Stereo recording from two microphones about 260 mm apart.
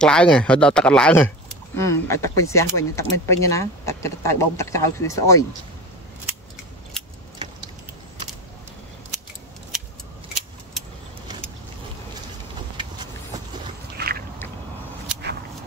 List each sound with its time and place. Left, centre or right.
0.0 s speech: centre
7.0 s keys jangling: centre
14.0 s a sound: right